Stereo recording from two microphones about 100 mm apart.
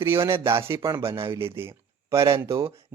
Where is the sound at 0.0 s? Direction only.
25° right (ahead or behind).